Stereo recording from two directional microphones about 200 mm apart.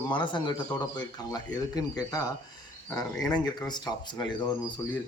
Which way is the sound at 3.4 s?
20° left (ahead or behind).